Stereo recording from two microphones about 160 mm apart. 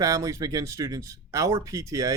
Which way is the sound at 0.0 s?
20° right (ahead or behind).